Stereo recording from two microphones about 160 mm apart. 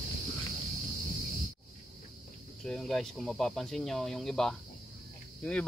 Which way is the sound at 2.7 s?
Centre (ahead or behind).